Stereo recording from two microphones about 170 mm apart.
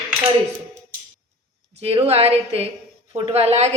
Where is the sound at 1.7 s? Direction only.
35° right (ahead or behind).